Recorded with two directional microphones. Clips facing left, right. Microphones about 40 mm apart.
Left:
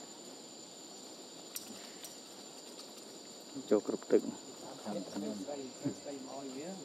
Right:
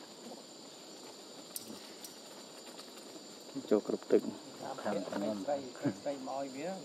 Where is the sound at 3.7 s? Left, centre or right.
Centre.